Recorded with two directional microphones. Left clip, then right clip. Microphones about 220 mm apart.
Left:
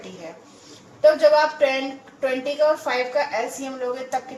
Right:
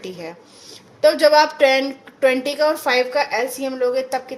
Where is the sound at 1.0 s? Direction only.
60° right (ahead or behind).